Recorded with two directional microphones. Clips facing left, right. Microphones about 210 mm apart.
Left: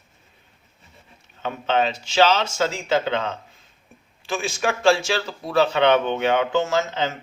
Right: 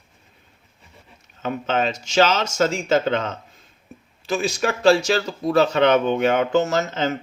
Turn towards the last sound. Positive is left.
turn(degrees=-45)  # may be behind; listen again after turning